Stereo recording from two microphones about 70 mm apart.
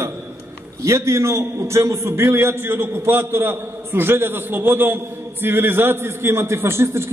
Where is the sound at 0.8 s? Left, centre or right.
Right.